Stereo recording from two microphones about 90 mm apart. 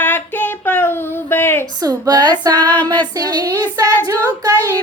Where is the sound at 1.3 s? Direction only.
25° left (ahead or behind).